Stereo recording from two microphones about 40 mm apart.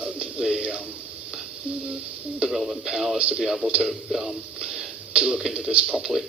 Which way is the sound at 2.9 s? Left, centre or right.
Centre.